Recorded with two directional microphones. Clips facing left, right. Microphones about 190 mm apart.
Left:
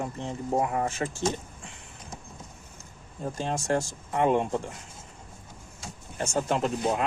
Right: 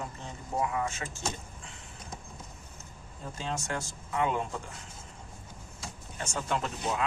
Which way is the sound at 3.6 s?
35° left (ahead or behind).